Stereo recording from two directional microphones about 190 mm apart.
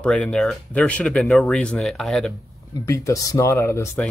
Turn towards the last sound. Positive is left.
turn(degrees=15)  # may be behind; listen again after turning